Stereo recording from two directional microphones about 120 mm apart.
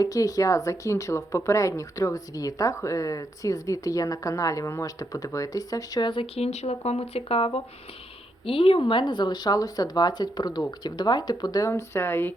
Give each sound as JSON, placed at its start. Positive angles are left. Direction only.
{"t": 0.0, "sound": "speech", "side_deg": 30}
{"t": 11.7, "sound": "speech", "side_deg": 20}